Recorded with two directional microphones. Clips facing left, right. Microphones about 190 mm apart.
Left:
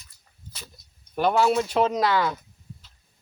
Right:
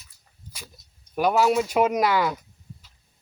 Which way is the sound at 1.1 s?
10° right (ahead or behind).